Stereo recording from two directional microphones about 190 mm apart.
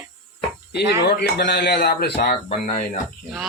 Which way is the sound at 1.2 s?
60° left (ahead or behind).